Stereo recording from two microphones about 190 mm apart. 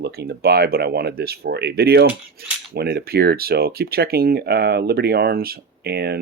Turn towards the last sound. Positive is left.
turn(degrees=-55)  # may be behind; listen again after turning